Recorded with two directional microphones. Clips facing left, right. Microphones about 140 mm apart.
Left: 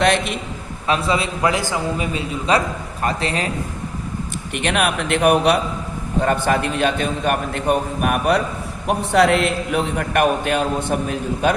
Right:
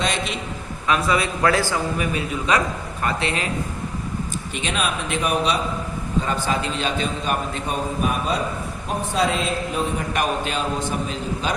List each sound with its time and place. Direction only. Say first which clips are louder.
0.0 s a man's voice: left 7 dB; 60° left (ahead or behind)
0.9 s a man's voice: left 1 dB; 30° left (ahead or behind)
3.0 s a man's voice: left 2 dB; 40° left (ahead or behind)
4.5 s a man's voice: left 6 dB; 60° left (ahead or behind)